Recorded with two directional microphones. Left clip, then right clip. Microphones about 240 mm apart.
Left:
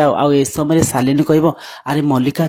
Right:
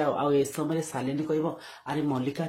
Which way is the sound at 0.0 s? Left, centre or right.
Left.